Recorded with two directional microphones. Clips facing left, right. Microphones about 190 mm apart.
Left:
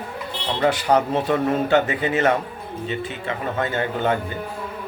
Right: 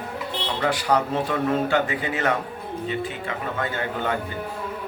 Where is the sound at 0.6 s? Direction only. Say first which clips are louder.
Left 4 dB; 25° left (ahead or behind).